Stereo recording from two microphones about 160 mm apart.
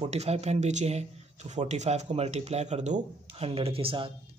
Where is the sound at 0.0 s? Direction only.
40° right (ahead or behind).